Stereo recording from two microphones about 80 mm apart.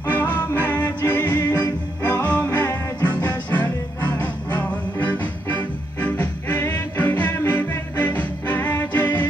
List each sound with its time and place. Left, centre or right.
0.0 s music: left
1.4 s music: left
2.0 s music: left